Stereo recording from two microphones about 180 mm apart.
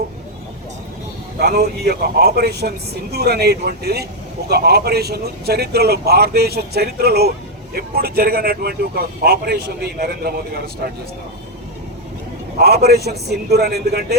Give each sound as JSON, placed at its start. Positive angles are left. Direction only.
{"t": 1.4, "sound": "a man's voice", "side_deg": -60}
{"t": 12.5, "sound": "a man's voice", "side_deg": -60}